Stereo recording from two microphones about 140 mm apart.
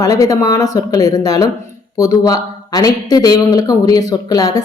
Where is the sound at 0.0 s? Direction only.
25° left (ahead or behind).